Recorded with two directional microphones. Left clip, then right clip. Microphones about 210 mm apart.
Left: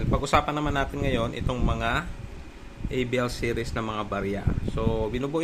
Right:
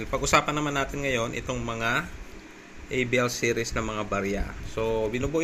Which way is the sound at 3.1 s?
Centre (ahead or behind).